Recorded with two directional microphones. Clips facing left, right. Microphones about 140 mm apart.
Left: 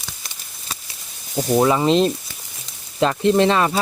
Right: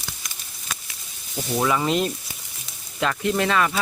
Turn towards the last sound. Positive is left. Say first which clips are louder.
# left 6 dB
turn(degrees=30)  # may be behind; listen again after turning